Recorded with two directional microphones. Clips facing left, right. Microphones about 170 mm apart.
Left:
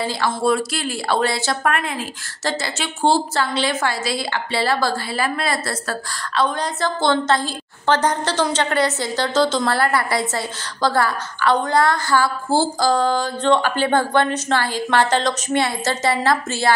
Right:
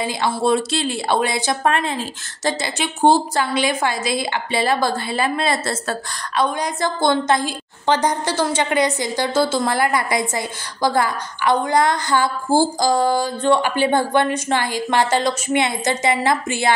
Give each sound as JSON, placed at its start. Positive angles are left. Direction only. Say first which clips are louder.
{"t": 0.0, "sound": "a woman's voice", "louder": "even", "side_deg": -20}
{"t": 6.3, "sound": "a woman's voice", "louder": "right 1 dB", "side_deg": -15}